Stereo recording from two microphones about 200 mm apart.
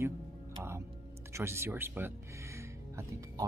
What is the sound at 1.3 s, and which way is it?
Speech, 15° right (ahead or behind).